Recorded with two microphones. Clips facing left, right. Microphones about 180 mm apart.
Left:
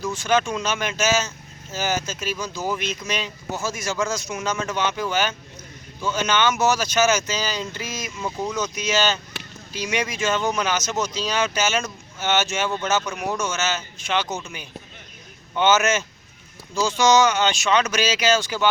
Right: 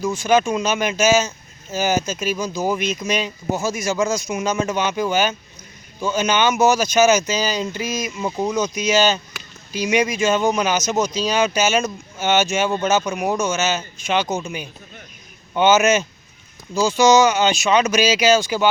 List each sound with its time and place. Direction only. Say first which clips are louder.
0.0 s speech: right 4 dB; 10° right (ahead or behind)